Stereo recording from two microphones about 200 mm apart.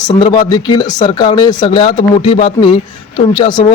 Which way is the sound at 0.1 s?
20° left (ahead or behind).